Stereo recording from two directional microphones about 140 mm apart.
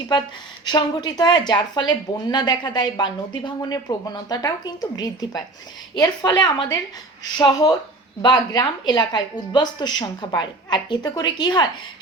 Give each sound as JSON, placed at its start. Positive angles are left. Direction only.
{"t": 0.6, "sound": "a woman's voice", "side_deg": 30}